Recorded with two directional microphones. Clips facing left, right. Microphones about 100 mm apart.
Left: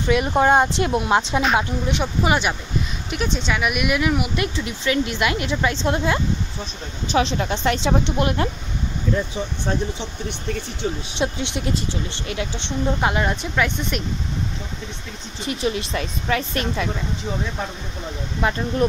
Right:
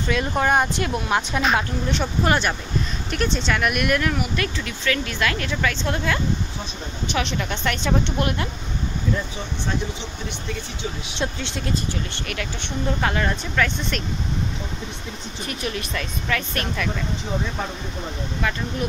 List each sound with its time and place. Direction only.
0.1 s speech: 20° left (ahead or behind)
11.1 s speech: 20° left (ahead or behind)
15.4 s speech: 25° left (ahead or behind)
18.4 s speech: 25° left (ahead or behind)
18.8 s speech: 35° left (ahead or behind)